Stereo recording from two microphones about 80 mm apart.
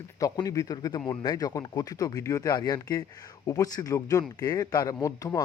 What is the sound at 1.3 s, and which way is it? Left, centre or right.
Speech, left.